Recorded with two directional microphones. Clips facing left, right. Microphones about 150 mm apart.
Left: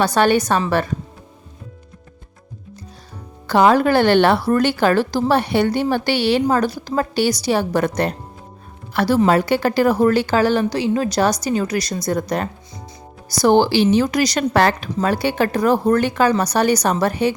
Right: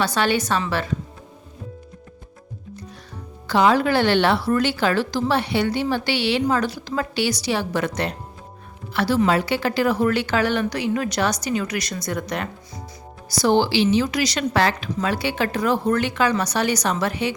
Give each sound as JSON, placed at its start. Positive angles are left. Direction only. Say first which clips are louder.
{"t": 0.0, "sound": "a woman's voice", "louder": "left 5 dB", "side_deg": 45}
{"t": 3.4, "sound": "a woman's voice", "louder": "left 4 dB", "side_deg": 50}
{"t": 13.4, "sound": "a woman's voice", "louder": "left 4 dB", "side_deg": 50}